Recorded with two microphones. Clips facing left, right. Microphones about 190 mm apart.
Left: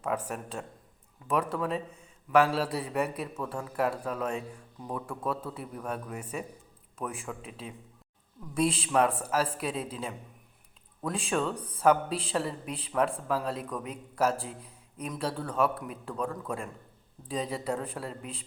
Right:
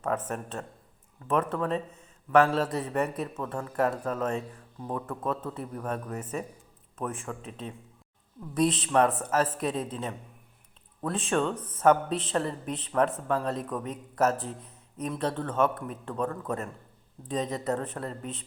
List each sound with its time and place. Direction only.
0.3 s a man's voice: 5° left (ahead or behind)
11.5 s speech: 35° left (ahead or behind)
11.8 s a man's voice: 10° left (ahead or behind)